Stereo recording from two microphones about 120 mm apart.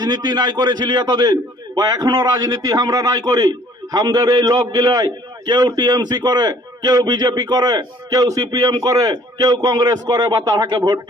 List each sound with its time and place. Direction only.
0.0 s a man's voice: 35° right (ahead or behind)